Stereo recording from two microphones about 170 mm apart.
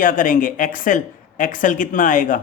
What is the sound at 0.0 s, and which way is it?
Speech, 55° left (ahead or behind).